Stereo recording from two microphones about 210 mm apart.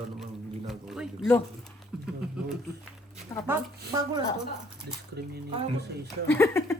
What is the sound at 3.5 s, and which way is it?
Speech, 15° right (ahead or behind).